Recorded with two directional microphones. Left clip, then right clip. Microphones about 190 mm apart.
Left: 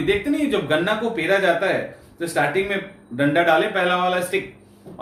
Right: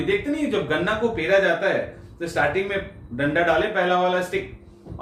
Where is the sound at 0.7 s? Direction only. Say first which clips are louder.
Left 2 dB; 15° left (ahead or behind).